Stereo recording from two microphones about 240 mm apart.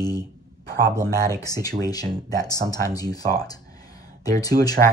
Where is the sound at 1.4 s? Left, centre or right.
Centre.